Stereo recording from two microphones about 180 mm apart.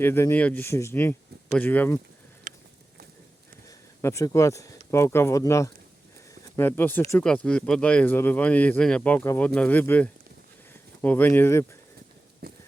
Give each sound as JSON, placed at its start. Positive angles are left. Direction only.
{"t": 0.0, "sound": "speech", "side_deg": 10}
{"t": 3.7, "sound": "speech", "side_deg": 15}
{"t": 12.4, "sound": "walk", "side_deg": -60}